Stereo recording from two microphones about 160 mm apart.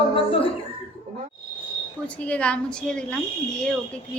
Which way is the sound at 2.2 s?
10° left (ahead or behind).